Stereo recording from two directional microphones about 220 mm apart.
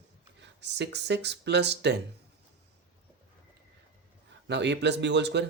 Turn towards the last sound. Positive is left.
turn(degrees=-50)  # may be behind; listen again after turning